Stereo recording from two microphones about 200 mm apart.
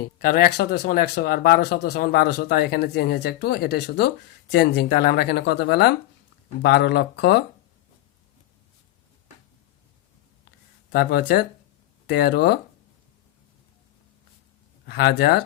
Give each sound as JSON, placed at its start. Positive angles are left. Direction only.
{"t": 0.2, "sound": "speech", "side_deg": 50}
{"t": 10.9, "sound": "speech", "side_deg": 50}
{"t": 14.8, "sound": "speech", "side_deg": 55}